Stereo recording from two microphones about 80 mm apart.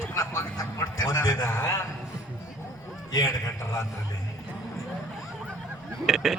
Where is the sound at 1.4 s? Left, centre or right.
Left.